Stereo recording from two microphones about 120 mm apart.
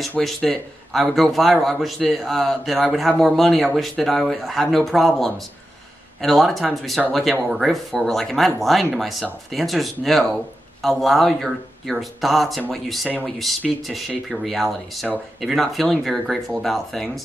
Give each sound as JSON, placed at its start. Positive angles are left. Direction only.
{"t": 0.2, "sound": "a man's voice", "side_deg": 0}